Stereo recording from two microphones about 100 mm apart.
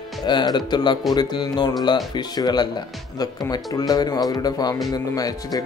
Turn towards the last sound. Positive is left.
turn(degrees=40)  # may be behind; listen again after turning